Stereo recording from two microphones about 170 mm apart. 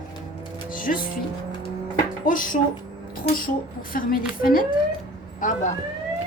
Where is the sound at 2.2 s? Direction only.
50° left (ahead or behind).